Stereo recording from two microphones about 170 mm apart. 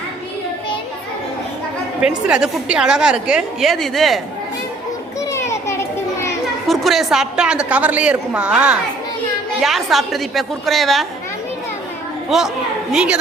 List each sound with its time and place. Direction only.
2.0 s a woman's voice: 5° right (ahead or behind)
5.3 s children playing: 15° left (ahead or behind)
6.7 s a woman's voice: centre (ahead or behind)
12.3 s a woman's voice: centre (ahead or behind)